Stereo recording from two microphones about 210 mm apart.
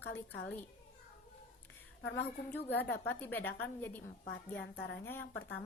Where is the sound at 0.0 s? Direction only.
10° left (ahead or behind).